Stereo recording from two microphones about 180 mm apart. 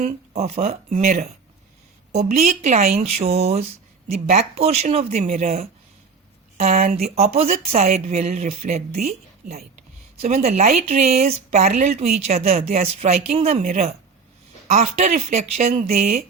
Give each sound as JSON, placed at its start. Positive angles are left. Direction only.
{"t": 0.0, "sound": "a woman's voice", "side_deg": -35}